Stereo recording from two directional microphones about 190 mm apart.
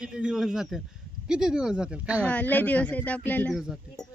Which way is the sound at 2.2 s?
10° left (ahead or behind).